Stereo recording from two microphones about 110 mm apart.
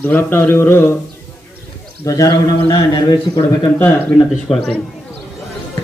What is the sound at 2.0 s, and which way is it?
A man's voice, 30° left (ahead or behind).